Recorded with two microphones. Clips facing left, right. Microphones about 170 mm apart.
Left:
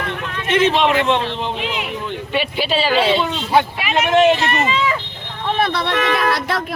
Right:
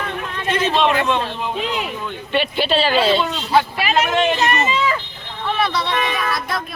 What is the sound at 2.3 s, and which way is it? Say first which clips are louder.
Speech: right 2 dB; 5° left (ahead or behind).